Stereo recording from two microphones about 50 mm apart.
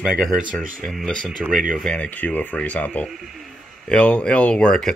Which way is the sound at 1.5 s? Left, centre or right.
Centre.